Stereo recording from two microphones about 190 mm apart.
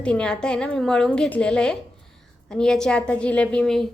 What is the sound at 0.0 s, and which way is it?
A woman's voice, 5° left (ahead or behind).